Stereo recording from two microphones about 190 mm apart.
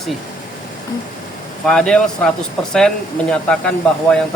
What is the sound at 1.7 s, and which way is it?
Speech, 5° left (ahead or behind).